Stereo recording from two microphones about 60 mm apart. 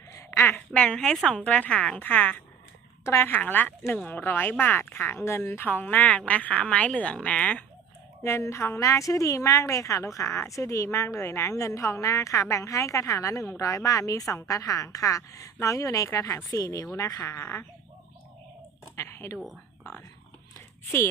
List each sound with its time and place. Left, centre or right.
0.3 s a sound: left
0.7 s a woman's voice: centre
2.0 s speech: left
3.0 s speech: left
3.2 s a woman's voice: left
8.2 s fowl: left
8.8 s a woman's voice: left
10.2 s a woman's voice: left
17.2 s speech: left
18.9 s speech: left